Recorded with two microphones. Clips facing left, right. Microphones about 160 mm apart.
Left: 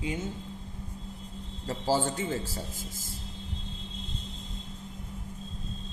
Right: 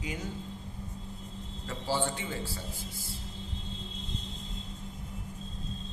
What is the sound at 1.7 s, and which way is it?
Speech, 40° left (ahead or behind).